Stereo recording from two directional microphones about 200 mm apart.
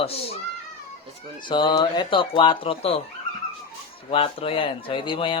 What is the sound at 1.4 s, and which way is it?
A man's voice, 25° left (ahead or behind).